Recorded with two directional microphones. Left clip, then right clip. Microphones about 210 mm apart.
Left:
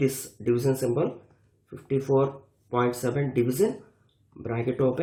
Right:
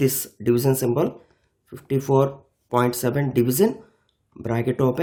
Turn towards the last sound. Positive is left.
turn(degrees=-45)  # may be behind; listen again after turning